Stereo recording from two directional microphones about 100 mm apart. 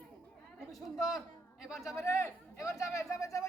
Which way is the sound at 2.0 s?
30° left (ahead or behind).